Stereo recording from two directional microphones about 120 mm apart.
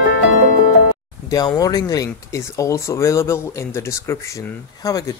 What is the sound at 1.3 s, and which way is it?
Speech, 30° left (ahead or behind).